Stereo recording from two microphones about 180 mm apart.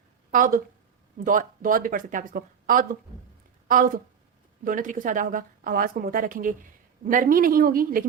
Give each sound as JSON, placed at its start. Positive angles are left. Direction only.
{"t": 0.3, "sound": "speech", "side_deg": -50}